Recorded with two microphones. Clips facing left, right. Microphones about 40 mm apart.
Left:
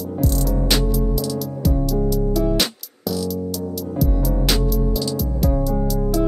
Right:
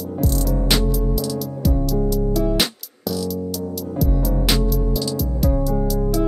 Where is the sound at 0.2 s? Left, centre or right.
Centre.